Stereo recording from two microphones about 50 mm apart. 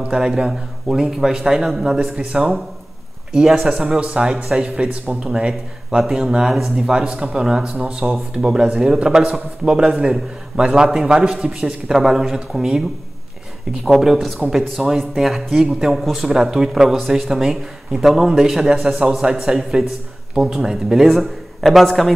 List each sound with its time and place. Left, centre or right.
0.1 s a man's voice: centre